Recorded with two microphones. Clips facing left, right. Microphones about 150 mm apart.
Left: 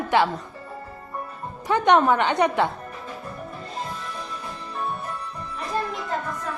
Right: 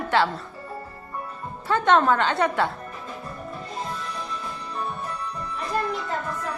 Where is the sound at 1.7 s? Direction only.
15° left (ahead or behind).